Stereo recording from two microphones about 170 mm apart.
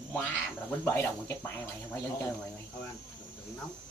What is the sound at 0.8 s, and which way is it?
Speech, 10° left (ahead or behind).